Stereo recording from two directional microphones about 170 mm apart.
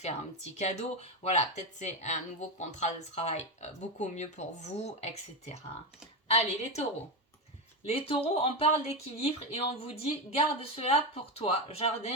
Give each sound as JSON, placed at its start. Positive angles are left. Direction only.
{"t": 0.6, "sound": "speech", "side_deg": 40}
{"t": 7.9, "sound": "speech", "side_deg": 35}